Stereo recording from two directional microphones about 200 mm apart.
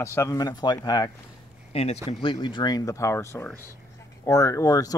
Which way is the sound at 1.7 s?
30° left (ahead or behind).